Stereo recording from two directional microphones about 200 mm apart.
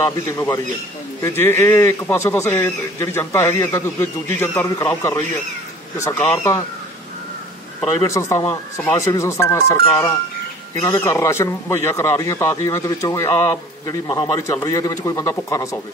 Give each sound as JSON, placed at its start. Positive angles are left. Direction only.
{"t": 0.0, "sound": "a man's voice", "side_deg": 15}
{"t": 8.0, "sound": "a man's voice", "side_deg": 15}